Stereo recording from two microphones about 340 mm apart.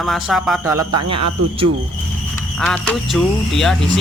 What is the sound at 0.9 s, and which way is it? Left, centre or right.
Speech, right.